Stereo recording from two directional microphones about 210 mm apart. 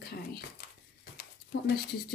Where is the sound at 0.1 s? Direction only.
50° left (ahead or behind).